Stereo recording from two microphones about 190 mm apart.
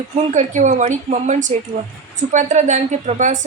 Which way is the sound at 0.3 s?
40° right (ahead or behind).